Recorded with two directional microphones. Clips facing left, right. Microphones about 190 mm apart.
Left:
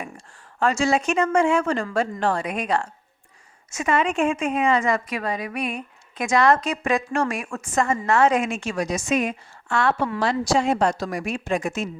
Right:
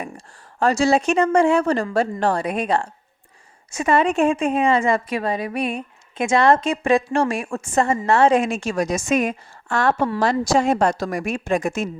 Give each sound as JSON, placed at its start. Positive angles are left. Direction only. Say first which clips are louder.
{"t": 0.6, "sound": "a woman's voice", "louder": "right 3 dB", "side_deg": -35}